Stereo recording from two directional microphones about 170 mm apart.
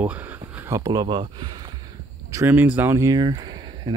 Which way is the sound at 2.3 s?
15° right (ahead or behind).